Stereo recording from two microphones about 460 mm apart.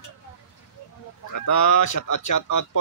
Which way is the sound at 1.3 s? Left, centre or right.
Left.